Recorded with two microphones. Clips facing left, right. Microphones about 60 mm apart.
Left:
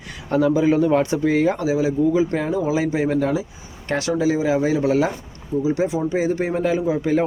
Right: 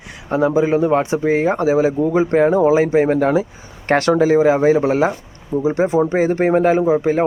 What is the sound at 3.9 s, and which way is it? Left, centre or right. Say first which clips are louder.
Speech: right 7 dB; right.